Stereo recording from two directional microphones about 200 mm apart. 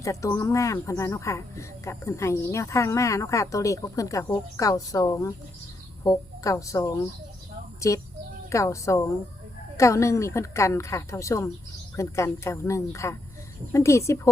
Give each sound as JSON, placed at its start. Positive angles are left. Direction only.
{"t": 0.0, "sound": "speech", "side_deg": 15}